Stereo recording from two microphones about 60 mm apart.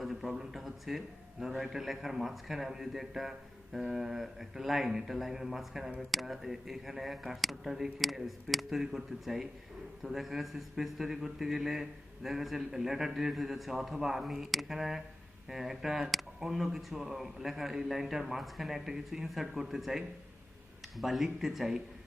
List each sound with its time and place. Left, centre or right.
0.0 s a man's voice: centre